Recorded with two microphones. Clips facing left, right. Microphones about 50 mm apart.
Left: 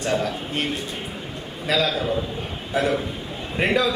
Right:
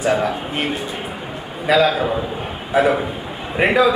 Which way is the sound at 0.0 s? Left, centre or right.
Centre.